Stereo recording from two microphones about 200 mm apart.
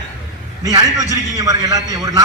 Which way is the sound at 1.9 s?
20° right (ahead or behind).